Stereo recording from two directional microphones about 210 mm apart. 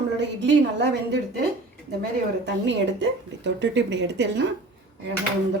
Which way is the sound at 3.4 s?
55° right (ahead or behind).